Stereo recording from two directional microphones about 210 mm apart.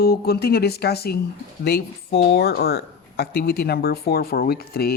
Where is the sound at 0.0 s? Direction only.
45° left (ahead or behind).